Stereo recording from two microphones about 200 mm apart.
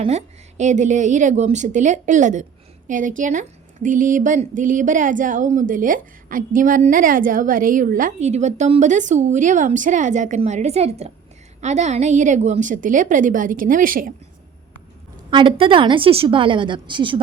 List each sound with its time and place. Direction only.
0.0 s a woman's voice: 35° right (ahead or behind)
15.3 s a woman's voice: 25° right (ahead or behind)